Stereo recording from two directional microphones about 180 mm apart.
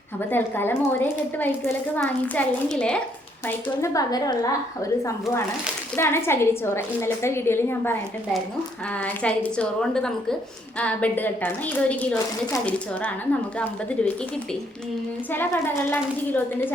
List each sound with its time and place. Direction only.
0.3 s a woman's voice: 10° left (ahead or behind)
3.4 s speech: 20° left (ahead or behind)
6.0 s a woman's voice: 15° left (ahead or behind)
9.0 s a woman's voice: 10° left (ahead or behind)
15.3 s a woman's voice: 10° left (ahead or behind)